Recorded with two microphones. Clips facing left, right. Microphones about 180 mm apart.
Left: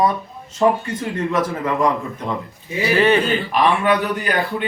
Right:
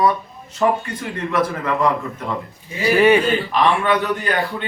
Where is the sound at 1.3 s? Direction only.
15° left (ahead or behind).